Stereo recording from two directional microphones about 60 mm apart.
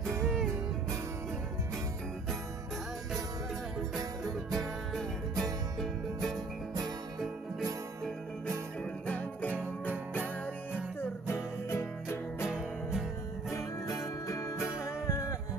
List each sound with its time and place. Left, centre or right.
4.5 s music: centre
9.0 s music: left
9.5 s music: right
11.0 s music: left
12.4 s music: centre
14.2 s music: left